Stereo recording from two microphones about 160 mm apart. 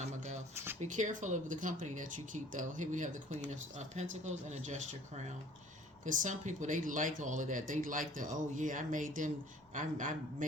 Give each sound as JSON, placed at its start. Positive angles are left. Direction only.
{"t": 0.8, "sound": "speech", "side_deg": -50}